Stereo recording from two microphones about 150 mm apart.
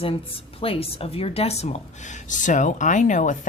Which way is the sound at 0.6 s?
40° left (ahead or behind).